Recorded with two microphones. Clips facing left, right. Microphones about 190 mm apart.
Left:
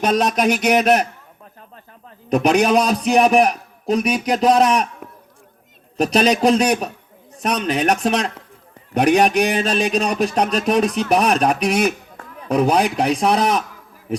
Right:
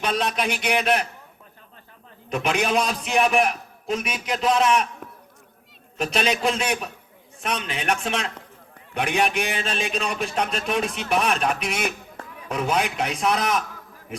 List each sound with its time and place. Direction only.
0.0 s a sound: 45° left (ahead or behind)
2.3 s a man's voice: 40° left (ahead or behind)
6.0 s a man's voice: 40° left (ahead or behind)